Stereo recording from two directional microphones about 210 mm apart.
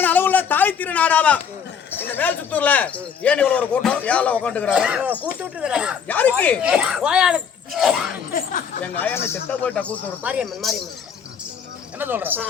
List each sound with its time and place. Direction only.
0.0 s a sound: 10° left (ahead or behind)
2.0 s speech: 10° left (ahead or behind)
4.7 s speech: 5° right (ahead or behind)
6.1 s speech: 5° left (ahead or behind)
6.6 s speech: 5° right (ahead or behind)
8.3 s speech: 40° left (ahead or behind)
8.8 s speech: 10° left (ahead or behind)
10.2 s speech: 5° right (ahead or behind)
11.9 s speech: 10° right (ahead or behind)